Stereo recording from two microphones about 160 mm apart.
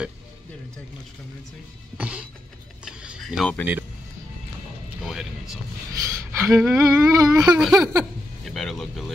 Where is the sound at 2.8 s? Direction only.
5° right (ahead or behind).